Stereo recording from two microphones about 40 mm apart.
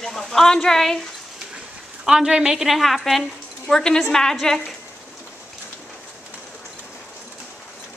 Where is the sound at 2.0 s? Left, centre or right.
Centre.